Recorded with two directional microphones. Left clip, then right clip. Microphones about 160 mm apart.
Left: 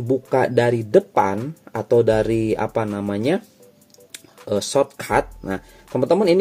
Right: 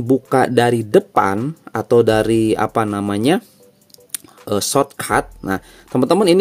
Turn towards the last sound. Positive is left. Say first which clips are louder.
# right 3 dB
turn(degrees=-35)  # may be behind; listen again after turning